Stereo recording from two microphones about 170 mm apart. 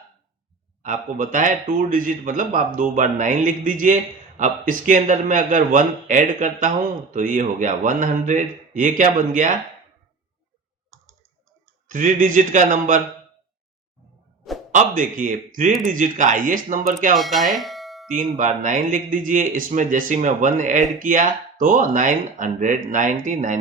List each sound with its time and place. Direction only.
0.8 s a man's voice: 50° right (ahead or behind)
11.9 s a man's voice: 50° right (ahead or behind)
14.7 s a man's voice: 50° right (ahead or behind)
17.2 s speech: centre (ahead or behind)
17.5 s doorbell: centre (ahead or behind)
18.3 s a man's voice: 50° right (ahead or behind)